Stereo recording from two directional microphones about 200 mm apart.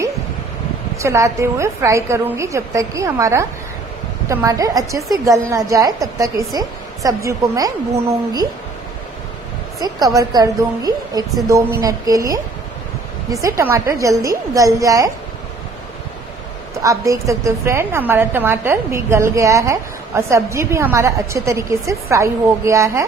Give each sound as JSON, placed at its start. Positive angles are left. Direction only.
{"t": 0.9, "sound": "a woman's voice", "side_deg": -15}
{"t": 9.8, "sound": "a woman's voice", "side_deg": -20}
{"t": 16.8, "sound": "a woman's voice", "side_deg": -15}